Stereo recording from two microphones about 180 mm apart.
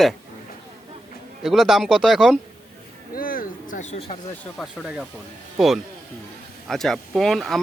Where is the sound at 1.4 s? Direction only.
Centre (ahead or behind).